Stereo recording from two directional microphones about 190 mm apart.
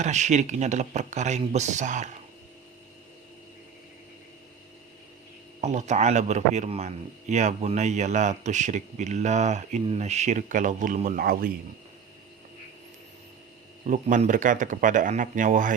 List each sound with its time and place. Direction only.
0.0 s a man's voice: 40° right (ahead or behind)
5.5 s a man's voice: 35° right (ahead or behind)
13.8 s speech: 40° right (ahead or behind)